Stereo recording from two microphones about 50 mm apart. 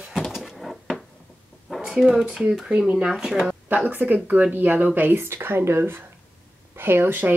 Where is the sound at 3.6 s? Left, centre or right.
Right.